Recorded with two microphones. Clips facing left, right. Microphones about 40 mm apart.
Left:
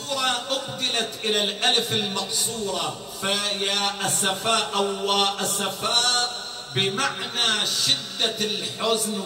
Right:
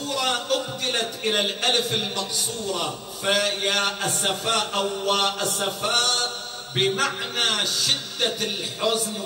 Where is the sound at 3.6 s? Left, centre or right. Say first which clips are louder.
Right 2 dB; right.